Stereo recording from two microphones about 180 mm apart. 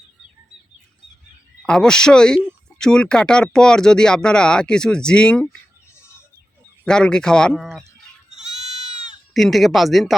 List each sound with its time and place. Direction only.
1.6 s speech: 5° left (ahead or behind)
6.8 s speech: 5° left (ahead or behind)
8.3 s goat: 40° right (ahead or behind)
9.3 s speech: centre (ahead or behind)